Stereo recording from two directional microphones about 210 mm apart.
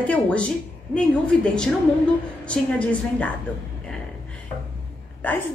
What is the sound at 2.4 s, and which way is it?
Speech, 5° left (ahead or behind).